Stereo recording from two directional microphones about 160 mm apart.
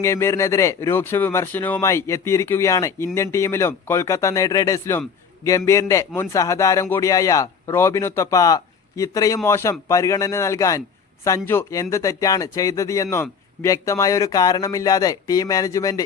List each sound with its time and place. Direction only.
0.0 s a man's voice: 15° left (ahead or behind)